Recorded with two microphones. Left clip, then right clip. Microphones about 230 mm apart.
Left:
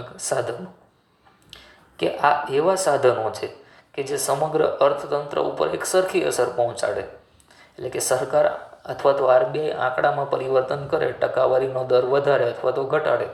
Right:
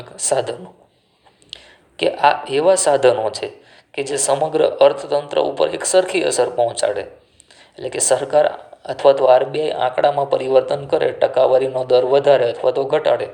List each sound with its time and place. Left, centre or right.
0.2 s speech: right
2.0 s speech: right